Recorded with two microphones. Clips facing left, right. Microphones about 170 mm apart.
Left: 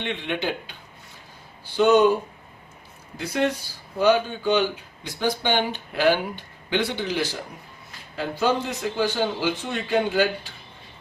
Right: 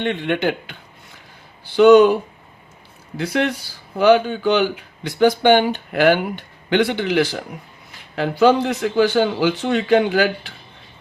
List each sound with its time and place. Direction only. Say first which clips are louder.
0.0 s speech: right 7 dB; 50° right (ahead or behind)
1.7 s a man's voice: right 7 dB; 90° right
3.2 s a man's voice: right 3 dB; 80° right
3.9 s a man's voice: right 6 dB; 90° right
5.0 s a man's voice: right 10 dB; 65° right (ahead or behind); by 10.5 s 90° right